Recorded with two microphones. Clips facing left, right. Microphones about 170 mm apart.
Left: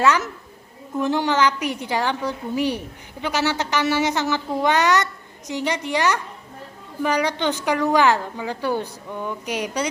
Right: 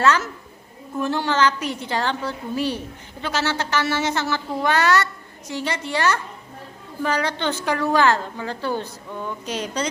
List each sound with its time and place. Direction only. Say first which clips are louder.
0.0 s a woman's voice: even; 15° left (ahead or behind)